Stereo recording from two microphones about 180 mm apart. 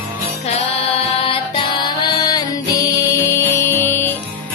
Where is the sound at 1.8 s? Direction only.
20° left (ahead or behind).